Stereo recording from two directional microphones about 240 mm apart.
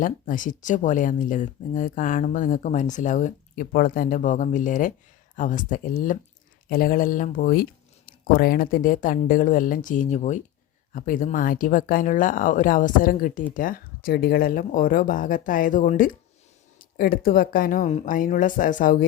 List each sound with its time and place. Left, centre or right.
0.0 s speech: left